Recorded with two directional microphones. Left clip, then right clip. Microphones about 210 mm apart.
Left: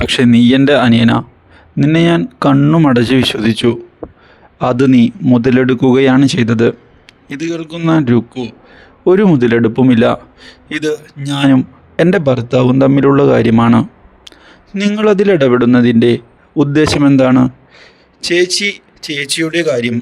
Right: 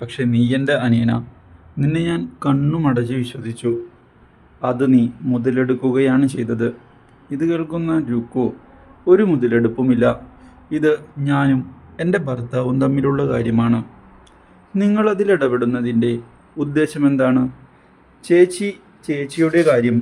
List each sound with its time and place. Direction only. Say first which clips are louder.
0.0 s a man's voice: left 11 dB; 50° left (ahead or behind)
14.3 s a sound: left 9 dB; 40° left (ahead or behind)
15.0 s a man's voice: left 8 dB; 40° left (ahead or behind)
19.4 s speech: right 1 dB; centre (ahead or behind)